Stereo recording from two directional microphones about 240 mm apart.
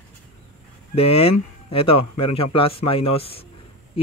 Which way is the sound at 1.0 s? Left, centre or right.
Left.